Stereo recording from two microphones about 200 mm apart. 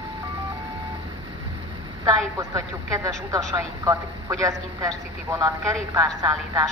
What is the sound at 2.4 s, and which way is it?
Speech, 15° right (ahead or behind).